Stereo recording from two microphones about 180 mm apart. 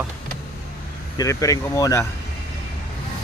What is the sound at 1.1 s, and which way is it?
Speech, 20° left (ahead or behind).